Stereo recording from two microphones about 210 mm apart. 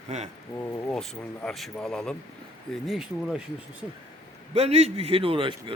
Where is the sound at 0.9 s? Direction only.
5° left (ahead or behind).